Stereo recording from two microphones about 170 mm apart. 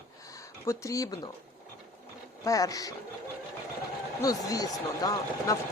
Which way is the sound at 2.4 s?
20° left (ahead or behind).